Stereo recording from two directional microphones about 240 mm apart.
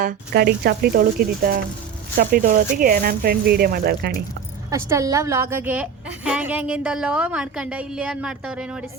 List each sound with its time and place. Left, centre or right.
0.0 s speech: right
4.7 s a woman's voice: centre